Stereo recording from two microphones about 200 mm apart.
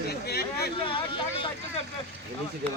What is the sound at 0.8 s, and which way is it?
Vehicle, 25° left (ahead or behind).